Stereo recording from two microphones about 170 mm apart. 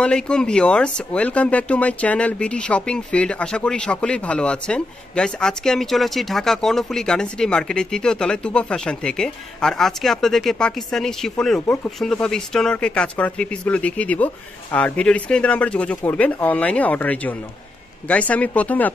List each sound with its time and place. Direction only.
0.0 s speech: 5° left (ahead or behind)